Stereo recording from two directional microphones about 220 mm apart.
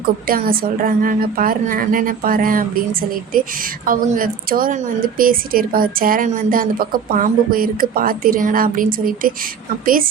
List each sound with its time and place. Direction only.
0.0 s a woman's voice: 40° right (ahead or behind)